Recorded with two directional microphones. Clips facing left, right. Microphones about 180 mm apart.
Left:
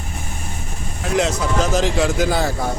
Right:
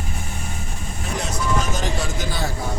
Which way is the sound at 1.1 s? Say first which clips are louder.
Left 6 dB; 90° left.